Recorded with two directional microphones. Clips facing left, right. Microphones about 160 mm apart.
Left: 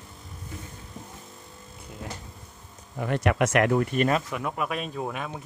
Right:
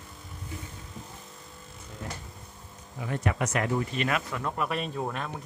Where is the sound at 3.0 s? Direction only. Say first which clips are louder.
Left 6 dB; 70° left (ahead or behind); by 4.1 s 55° left (ahead or behind).